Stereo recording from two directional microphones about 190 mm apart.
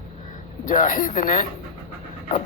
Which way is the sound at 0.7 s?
45° left (ahead or behind).